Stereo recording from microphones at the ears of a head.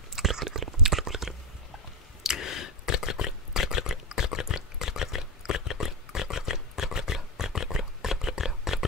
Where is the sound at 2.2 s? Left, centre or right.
Left.